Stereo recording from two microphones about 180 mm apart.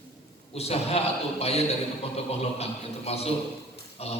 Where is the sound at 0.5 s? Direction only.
35° left (ahead or behind).